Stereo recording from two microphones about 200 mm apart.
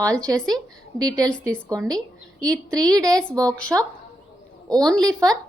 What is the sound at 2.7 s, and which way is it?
Speech, 20° right (ahead or behind).